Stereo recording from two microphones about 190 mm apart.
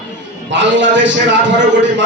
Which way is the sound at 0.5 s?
75° right (ahead or behind).